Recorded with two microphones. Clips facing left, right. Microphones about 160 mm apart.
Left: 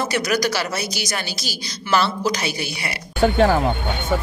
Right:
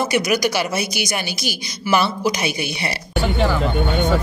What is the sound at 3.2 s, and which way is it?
Speech, 50° left (ahead or behind).